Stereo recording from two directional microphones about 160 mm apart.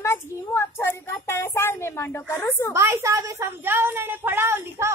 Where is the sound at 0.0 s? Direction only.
15° left (ahead or behind).